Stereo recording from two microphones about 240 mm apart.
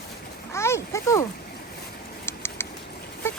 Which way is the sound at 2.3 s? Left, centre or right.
Centre.